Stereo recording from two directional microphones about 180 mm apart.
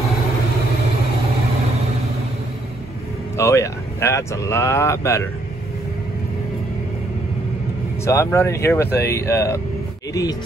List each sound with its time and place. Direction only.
3.3 s speech: 15° left (ahead or behind)
8.0 s speech: 15° left (ahead or behind)